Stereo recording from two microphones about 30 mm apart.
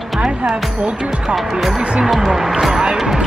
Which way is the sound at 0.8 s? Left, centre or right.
Right.